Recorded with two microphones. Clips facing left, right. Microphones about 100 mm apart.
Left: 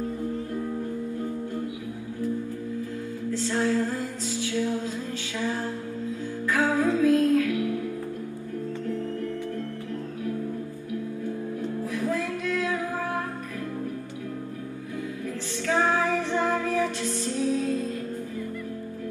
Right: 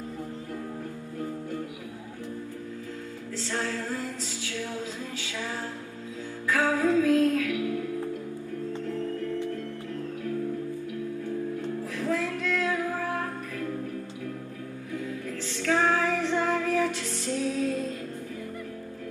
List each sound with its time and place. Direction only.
3.3 s music: 15° left (ahead or behind)
6.5 s music: 15° left (ahead or behind)
11.9 s a sound: 15° left (ahead or behind)
15.6 s female singing: 15° left (ahead or behind)